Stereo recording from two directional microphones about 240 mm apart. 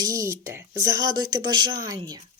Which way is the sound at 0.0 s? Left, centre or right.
Centre.